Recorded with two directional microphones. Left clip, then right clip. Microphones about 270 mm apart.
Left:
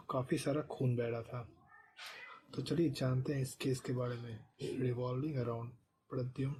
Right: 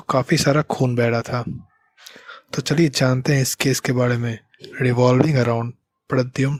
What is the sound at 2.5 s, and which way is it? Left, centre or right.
Speech, right.